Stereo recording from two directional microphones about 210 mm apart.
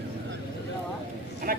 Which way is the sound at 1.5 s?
45° right (ahead or behind).